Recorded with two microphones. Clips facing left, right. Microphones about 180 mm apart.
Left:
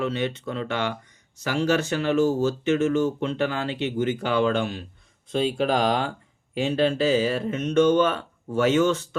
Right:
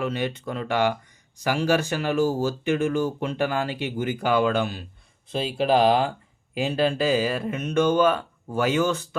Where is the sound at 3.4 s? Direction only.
50° right (ahead or behind).